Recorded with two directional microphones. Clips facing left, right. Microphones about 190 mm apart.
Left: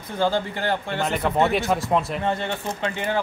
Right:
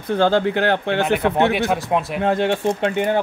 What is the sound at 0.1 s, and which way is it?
Speech, 70° right (ahead or behind).